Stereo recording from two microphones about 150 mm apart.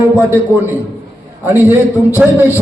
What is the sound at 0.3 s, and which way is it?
A man's voice, 15° right (ahead or behind).